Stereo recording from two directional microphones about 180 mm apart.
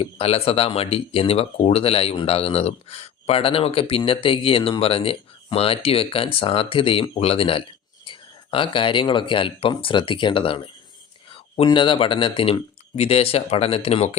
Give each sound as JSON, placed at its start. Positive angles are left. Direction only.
{"t": 0.0, "sound": "speech", "side_deg": 35}